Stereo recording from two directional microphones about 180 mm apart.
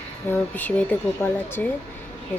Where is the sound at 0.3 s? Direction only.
10° left (ahead or behind).